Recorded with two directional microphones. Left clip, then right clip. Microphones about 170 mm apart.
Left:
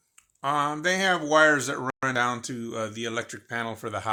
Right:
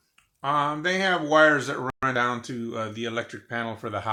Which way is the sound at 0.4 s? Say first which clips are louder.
Right 1 dB; 50° left (ahead or behind).